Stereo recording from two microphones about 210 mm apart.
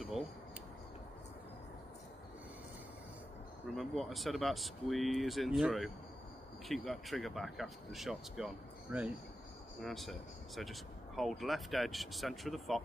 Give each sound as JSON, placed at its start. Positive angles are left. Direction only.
{"t": 3.7, "sound": "speech", "side_deg": 0}